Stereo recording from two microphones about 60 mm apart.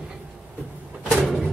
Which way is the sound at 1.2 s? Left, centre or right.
Centre.